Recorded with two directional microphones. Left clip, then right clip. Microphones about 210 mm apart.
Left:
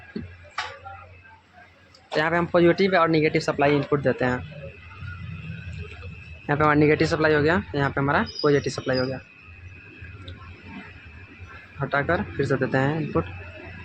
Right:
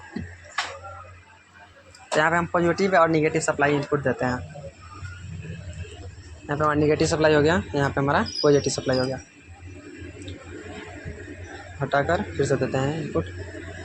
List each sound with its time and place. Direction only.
2.1 s speech: 20° left (ahead or behind)
2.7 s speech: 15° left (ahead or behind)
6.5 s speech: 25° left (ahead or behind); by 9.0 s 10° left (ahead or behind)
11.8 s speech: 10° left (ahead or behind)